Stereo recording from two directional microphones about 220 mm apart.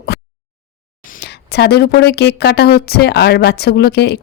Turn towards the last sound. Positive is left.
turn(degrees=50)  # may be behind; listen again after turning